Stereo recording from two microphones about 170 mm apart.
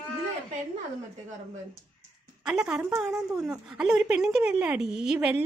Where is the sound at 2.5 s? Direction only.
5° right (ahead or behind).